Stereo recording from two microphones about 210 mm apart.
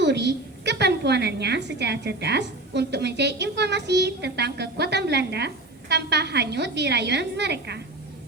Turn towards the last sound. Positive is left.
turn(degrees=-55)  # may be behind; listen again after turning